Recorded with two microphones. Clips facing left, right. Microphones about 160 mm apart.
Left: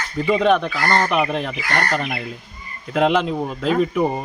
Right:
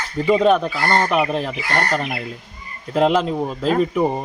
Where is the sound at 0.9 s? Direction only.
5° right (ahead or behind).